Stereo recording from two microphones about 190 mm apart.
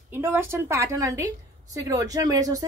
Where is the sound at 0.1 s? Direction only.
10° right (ahead or behind).